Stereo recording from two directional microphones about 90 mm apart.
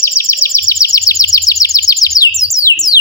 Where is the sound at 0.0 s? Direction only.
30° left (ahead or behind).